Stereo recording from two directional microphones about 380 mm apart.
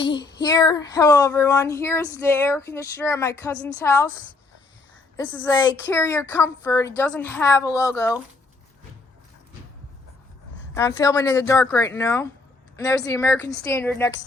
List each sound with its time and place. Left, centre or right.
0.0 s child singing: centre
5.3 s child singing: centre
10.8 s child singing: centre